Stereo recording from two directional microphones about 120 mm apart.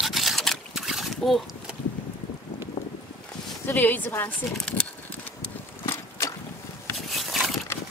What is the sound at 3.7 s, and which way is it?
Speech, 15° left (ahead or behind).